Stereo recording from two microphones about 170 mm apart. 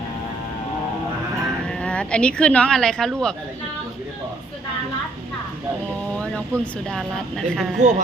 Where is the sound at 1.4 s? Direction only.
5° left (ahead or behind).